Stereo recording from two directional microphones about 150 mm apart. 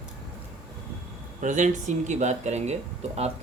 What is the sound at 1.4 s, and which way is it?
Speech, 55° right (ahead or behind).